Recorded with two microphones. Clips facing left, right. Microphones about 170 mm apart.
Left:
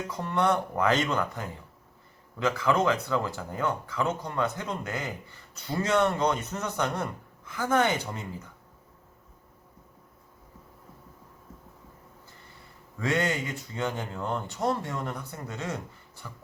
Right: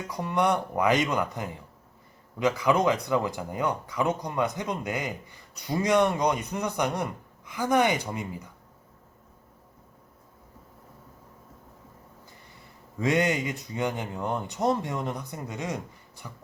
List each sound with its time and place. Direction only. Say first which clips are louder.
0.1 s speech: right 1 dB; 15° right (ahead or behind)
13.0 s speech: right 3 dB; 20° right (ahead or behind)